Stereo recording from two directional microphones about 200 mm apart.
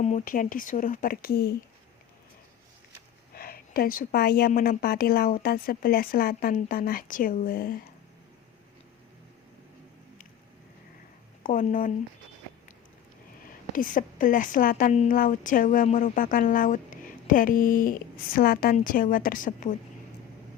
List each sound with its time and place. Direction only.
0.0 s a woman's voice: 40° left (ahead or behind)
3.3 s a woman's voice: 50° left (ahead or behind)
11.4 s speech: 40° left (ahead or behind)
13.7 s a woman's voice: 40° left (ahead or behind)